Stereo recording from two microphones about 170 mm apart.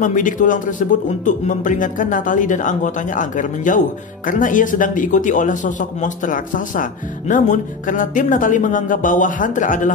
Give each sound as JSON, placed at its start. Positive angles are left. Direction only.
{"t": 0.0, "sound": "a man's voice", "side_deg": 50}